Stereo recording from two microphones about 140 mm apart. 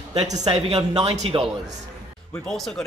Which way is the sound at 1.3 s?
35° right (ahead or behind).